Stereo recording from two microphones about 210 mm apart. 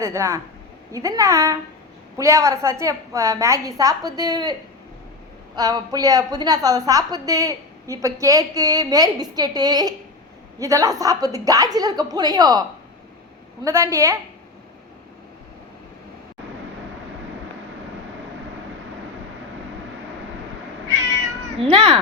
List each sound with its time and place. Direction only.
0.0 s a woman's voice: 15° right (ahead or behind)
5.5 s a woman's voice: 20° right (ahead or behind)
13.7 s a woman's voice: 15° right (ahead or behind)
21.6 s a child's voice: 25° right (ahead or behind)